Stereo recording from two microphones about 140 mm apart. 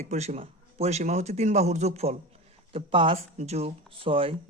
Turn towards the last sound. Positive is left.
turn(degrees=-40)  # may be behind; listen again after turning